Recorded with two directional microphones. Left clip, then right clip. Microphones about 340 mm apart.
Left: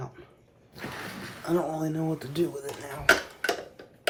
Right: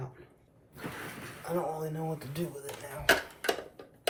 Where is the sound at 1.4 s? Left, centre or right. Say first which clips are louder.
Left 5 dB; left.